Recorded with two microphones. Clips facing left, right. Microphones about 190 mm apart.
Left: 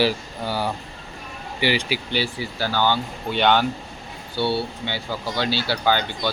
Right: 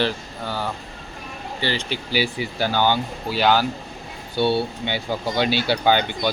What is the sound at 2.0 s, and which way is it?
Speech, 10° right (ahead or behind).